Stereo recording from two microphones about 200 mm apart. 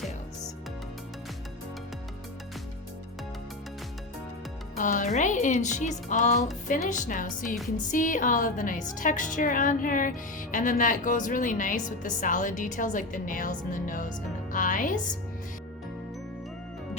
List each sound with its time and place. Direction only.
4.8 s a woman's voice: 40° left (ahead or behind)
14.5 s music: 40° left (ahead or behind)